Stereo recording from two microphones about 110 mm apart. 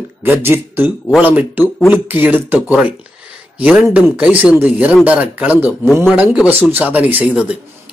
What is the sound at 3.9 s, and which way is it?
Speech, 15° right (ahead or behind).